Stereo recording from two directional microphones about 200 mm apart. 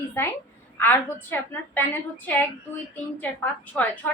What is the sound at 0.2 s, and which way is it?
A woman's voice, 10° left (ahead or behind).